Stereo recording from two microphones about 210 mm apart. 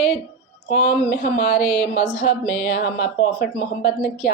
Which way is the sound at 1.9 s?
50° left (ahead or behind).